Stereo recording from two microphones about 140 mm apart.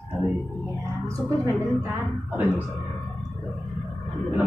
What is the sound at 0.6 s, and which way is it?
A woman's voice, 20° right (ahead or behind).